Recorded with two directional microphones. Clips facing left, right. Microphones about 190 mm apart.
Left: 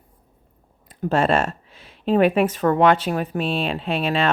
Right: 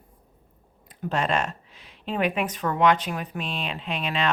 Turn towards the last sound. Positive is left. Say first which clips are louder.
# left 6 dB
turn(degrees=45)  # may be behind; listen again after turning